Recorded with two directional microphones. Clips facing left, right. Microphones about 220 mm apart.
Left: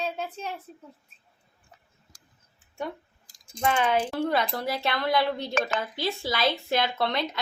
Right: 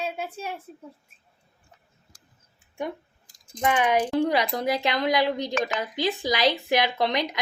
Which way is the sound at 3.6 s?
15° right (ahead or behind).